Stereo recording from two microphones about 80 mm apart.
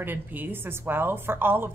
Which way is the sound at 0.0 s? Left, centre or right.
Right.